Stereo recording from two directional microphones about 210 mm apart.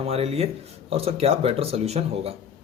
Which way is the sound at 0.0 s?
30° right (ahead or behind).